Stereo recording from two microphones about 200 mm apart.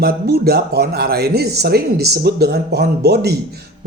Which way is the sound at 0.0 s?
50° right (ahead or behind).